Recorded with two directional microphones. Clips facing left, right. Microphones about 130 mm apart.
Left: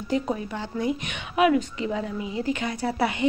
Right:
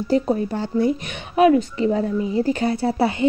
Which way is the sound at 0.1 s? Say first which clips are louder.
Right 6 dB; 35° right (ahead or behind).